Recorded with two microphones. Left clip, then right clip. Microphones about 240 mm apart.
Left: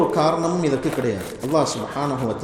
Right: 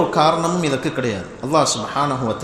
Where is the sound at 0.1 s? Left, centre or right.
Right.